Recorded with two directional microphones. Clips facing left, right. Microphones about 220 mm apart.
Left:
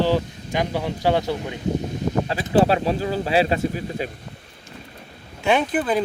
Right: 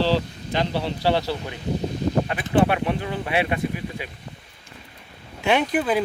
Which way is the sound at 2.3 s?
30° left (ahead or behind).